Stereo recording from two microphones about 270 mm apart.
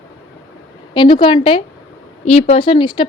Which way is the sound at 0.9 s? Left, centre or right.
Centre.